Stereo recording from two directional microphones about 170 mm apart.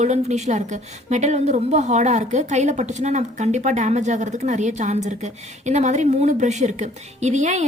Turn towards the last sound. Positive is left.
turn(degrees=-45)  # may be behind; listen again after turning